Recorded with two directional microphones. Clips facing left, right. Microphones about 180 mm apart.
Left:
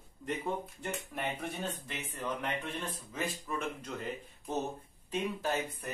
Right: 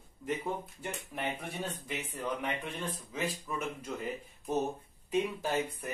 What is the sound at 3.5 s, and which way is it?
Speech, 5° right (ahead or behind).